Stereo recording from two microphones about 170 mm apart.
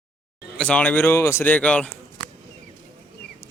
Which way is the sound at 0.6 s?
5° left (ahead or behind).